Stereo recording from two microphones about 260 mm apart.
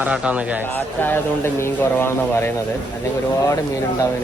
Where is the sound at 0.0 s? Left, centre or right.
Centre.